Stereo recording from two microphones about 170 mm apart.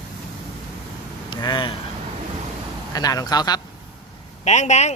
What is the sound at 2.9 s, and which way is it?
Speech, 20° left (ahead or behind).